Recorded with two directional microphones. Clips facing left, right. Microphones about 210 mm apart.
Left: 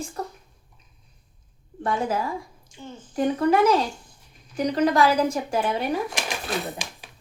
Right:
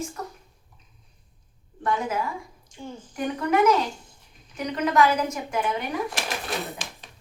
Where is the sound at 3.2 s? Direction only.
30° left (ahead or behind).